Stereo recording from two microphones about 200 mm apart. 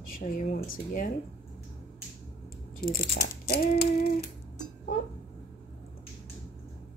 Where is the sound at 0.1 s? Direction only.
40° left (ahead or behind).